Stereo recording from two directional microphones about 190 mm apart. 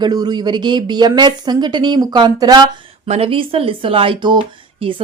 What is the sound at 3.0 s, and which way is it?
A woman's voice, 35° right (ahead or behind).